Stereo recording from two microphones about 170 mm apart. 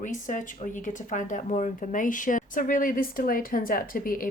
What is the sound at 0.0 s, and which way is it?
Speech, 50° left (ahead or behind).